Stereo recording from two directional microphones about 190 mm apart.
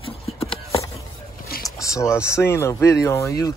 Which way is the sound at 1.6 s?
15° left (ahead or behind).